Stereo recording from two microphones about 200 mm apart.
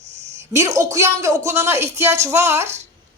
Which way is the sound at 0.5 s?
15° right (ahead or behind).